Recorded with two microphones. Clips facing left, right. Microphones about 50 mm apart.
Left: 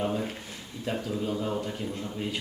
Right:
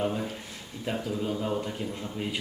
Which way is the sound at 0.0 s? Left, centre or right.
Centre.